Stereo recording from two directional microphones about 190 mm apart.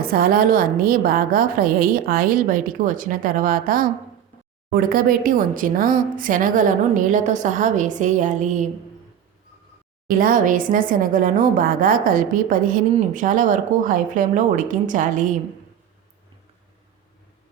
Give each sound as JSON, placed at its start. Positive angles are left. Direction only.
{"t": 0.0, "sound": "a woman's voice", "side_deg": -50}
{"t": 10.1, "sound": "a woman's voice", "side_deg": -45}